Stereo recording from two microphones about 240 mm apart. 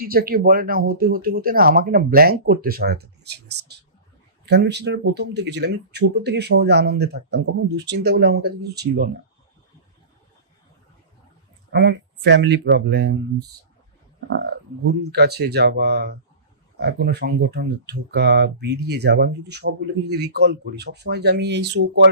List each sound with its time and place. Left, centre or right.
0.0 s speech: right
11.7 s speech: right
14.3 s speech: right